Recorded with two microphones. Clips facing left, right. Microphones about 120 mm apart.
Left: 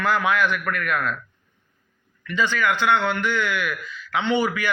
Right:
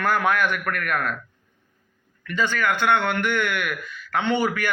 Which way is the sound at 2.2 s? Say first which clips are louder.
Left 1 dB; 45° right (ahead or behind).